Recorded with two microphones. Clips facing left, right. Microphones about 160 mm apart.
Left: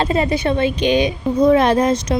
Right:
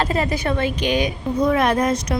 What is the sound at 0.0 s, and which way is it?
Speech, 25° left (ahead or behind).